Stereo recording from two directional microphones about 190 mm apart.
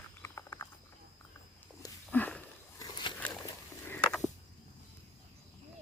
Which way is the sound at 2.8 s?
20° left (ahead or behind).